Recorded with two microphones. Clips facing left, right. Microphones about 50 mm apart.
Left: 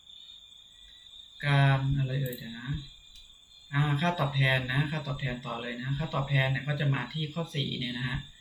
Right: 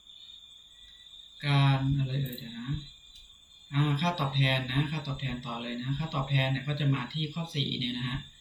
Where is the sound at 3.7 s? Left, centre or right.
Left.